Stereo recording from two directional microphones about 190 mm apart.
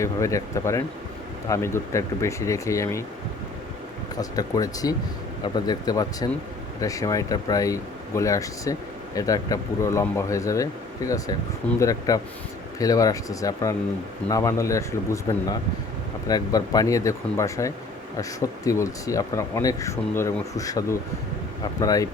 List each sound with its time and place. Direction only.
0.0 s speech: 15° left (ahead or behind)
4.2 s speech: 20° left (ahead or behind)
16.3 s speech: 20° left (ahead or behind)